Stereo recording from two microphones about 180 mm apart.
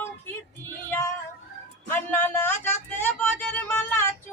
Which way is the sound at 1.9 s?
10° left (ahead or behind).